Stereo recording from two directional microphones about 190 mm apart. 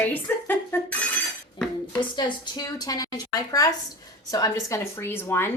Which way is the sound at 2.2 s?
25° left (ahead or behind).